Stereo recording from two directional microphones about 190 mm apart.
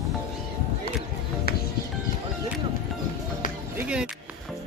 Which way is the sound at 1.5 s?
55° left (ahead or behind).